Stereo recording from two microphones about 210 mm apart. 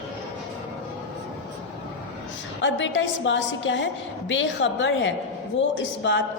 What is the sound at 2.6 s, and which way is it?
A woman's voice, 60° left (ahead or behind).